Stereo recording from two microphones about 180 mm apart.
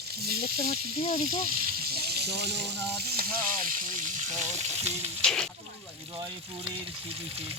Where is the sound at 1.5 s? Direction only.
55° right (ahead or behind).